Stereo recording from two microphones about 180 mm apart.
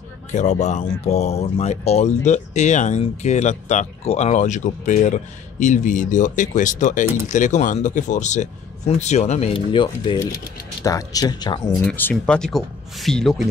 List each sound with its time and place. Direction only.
0.3 s speech: 40° left (ahead or behind); by 11.6 s 25° left (ahead or behind)
11.8 s speech: 10° left (ahead or behind)